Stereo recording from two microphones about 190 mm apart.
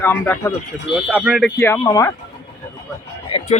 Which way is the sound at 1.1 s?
Centre (ahead or behind).